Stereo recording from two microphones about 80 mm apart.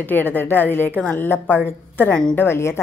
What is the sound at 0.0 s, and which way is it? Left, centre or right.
A woman's voice, left.